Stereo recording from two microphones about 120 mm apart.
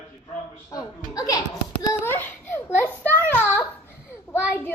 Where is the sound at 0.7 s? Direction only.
30° left (ahead or behind).